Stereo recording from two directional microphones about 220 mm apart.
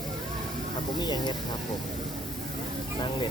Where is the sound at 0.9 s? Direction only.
20° left (ahead or behind).